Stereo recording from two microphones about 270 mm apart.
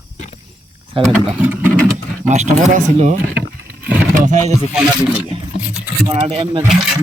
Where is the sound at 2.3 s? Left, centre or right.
Right.